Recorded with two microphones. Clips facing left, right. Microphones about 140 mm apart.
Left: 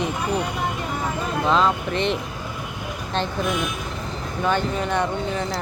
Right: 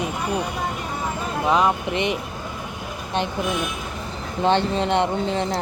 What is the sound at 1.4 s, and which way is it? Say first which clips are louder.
Speech: right 1 dB; 15° right (ahead or behind).